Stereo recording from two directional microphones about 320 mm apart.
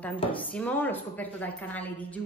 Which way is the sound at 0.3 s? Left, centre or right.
Centre.